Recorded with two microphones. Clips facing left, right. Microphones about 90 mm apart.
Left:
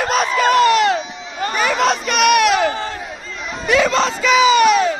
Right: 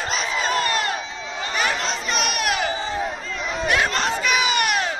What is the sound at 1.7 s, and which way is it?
Chatter, 70° left (ahead or behind).